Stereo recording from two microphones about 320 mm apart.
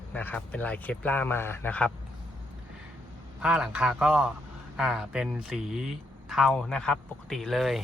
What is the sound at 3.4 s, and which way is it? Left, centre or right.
Speech, centre.